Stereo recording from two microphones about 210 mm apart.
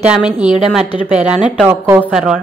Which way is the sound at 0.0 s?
5° right (ahead or behind).